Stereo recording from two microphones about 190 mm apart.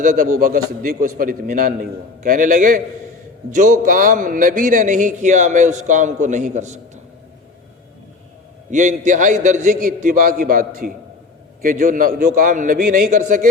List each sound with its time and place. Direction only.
0.0 s a man's voice: 45° right (ahead or behind)
8.7 s a man's voice: 40° right (ahead or behind)